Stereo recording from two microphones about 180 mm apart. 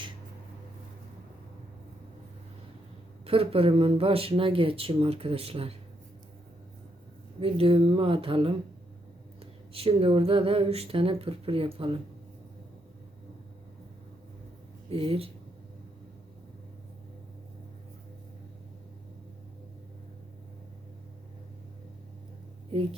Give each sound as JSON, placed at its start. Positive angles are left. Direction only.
{"t": 3.2, "sound": "speech", "side_deg": -30}
{"t": 7.3, "sound": "a woman's voice", "side_deg": -30}
{"t": 14.8, "sound": "speech", "side_deg": -30}
{"t": 22.7, "sound": "speech", "side_deg": -30}